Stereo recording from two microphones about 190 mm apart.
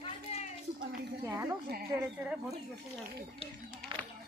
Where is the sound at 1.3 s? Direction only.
15° right (ahead or behind).